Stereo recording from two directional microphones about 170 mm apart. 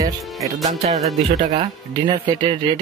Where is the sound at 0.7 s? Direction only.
40° right (ahead or behind).